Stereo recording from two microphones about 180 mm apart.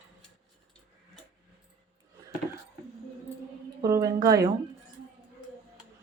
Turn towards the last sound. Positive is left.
turn(degrees=-20)  # may be behind; listen again after turning